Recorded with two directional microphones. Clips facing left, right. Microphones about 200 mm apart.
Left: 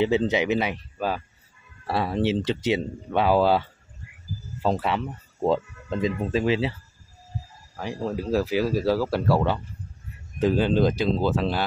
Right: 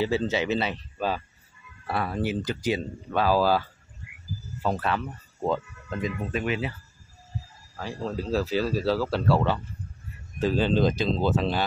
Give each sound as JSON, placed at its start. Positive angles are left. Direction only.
{"t": 0.0, "sound": "speech", "side_deg": 20}
{"t": 1.9, "sound": "speech", "side_deg": 25}
{"t": 4.8, "sound": "speech", "side_deg": 20}
{"t": 7.7, "sound": "speech", "side_deg": 15}